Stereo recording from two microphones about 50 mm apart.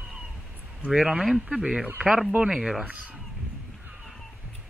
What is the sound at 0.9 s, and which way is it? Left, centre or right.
Speech, centre.